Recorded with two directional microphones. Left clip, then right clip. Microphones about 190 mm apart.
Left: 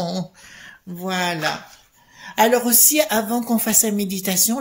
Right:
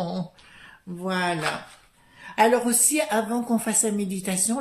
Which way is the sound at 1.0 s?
45° left (ahead or behind).